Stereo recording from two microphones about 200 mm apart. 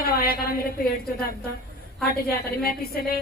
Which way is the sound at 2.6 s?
50° left (ahead or behind).